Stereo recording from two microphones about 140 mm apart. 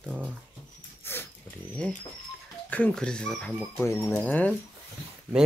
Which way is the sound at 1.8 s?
10° left (ahead or behind).